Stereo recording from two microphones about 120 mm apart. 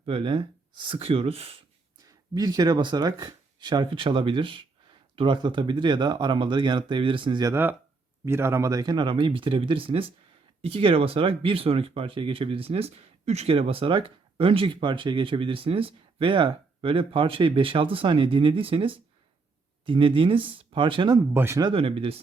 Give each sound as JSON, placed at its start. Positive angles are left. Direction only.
{"t": 0.0, "sound": "speech", "side_deg": -50}
{"t": 2.3, "sound": "speech", "side_deg": -35}
{"t": 7.5, "sound": "speech", "side_deg": -15}
{"t": 21.3, "sound": "speech", "side_deg": -20}
{"t": 21.6, "sound": "speech", "side_deg": -50}